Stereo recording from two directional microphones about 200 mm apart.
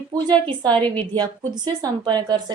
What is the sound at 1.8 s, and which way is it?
Speech, 20° right (ahead or behind).